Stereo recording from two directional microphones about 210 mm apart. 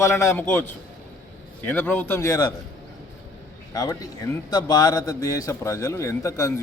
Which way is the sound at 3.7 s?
15° left (ahead or behind).